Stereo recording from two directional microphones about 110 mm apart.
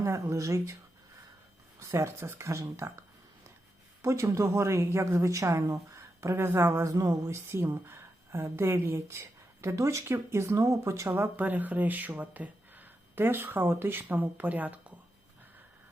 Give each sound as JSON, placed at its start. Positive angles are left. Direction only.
{"t": 0.0, "sound": "speech", "side_deg": -25}
{"t": 1.8, "sound": "speech", "side_deg": -25}
{"t": 4.0, "sound": "speech", "side_deg": -25}